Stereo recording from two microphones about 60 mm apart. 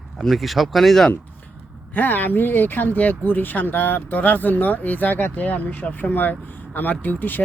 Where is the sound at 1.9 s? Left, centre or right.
Left.